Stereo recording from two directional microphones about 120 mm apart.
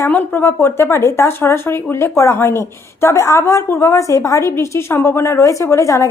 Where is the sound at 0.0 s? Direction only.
15° left (ahead or behind).